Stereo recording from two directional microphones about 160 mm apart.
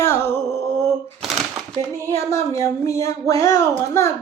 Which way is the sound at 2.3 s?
20° left (ahead or behind).